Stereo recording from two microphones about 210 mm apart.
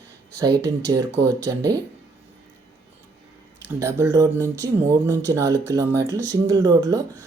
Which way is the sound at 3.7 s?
15° right (ahead or behind).